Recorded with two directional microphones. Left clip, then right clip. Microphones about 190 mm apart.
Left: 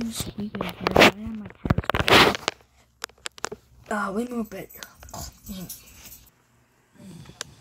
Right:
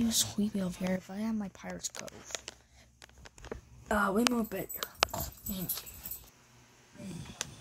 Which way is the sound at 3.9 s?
Centre (ahead or behind).